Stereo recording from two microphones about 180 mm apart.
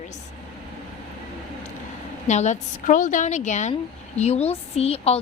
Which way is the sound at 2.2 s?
40° left (ahead or behind).